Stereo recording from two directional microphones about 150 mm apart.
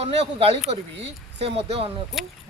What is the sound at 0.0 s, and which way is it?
Speech, 40° right (ahead or behind).